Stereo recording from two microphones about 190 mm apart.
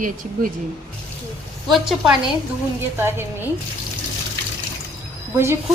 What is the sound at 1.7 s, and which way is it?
Speech, centre (ahead or behind).